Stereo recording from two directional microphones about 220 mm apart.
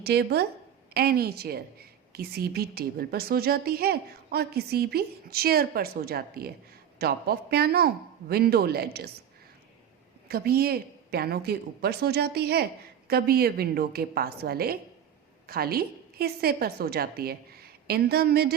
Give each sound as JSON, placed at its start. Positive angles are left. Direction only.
{"t": 0.0, "sound": "a woman's voice", "side_deg": -45}
{"t": 10.2, "sound": "a woman's voice", "side_deg": -45}